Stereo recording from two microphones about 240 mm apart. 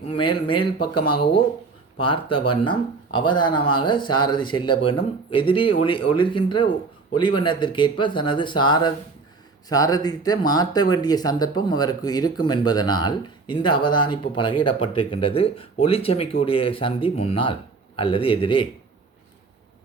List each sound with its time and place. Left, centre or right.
0.1 s speech: left
2.0 s speech: left